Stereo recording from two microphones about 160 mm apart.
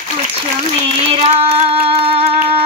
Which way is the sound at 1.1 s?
40° right (ahead or behind).